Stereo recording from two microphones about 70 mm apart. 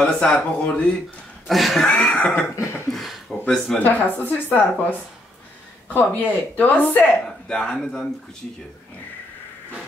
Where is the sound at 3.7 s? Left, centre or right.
Left.